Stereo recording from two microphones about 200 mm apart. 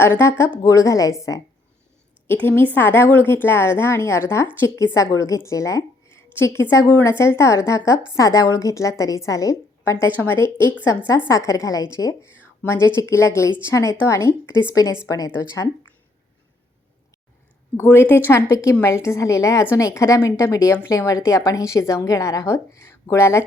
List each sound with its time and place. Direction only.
0.0 s a woman's voice: 10° left (ahead or behind)
17.7 s a woman's voice: 10° left (ahead or behind)